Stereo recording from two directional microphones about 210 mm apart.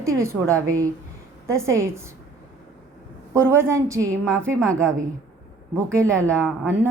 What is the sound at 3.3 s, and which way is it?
Speech, 10° right (ahead or behind).